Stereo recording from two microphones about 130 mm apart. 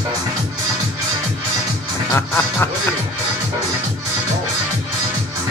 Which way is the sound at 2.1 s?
15° left (ahead or behind).